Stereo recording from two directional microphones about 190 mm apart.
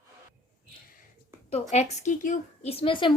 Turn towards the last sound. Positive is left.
turn(degrees=25)  # may be behind; listen again after turning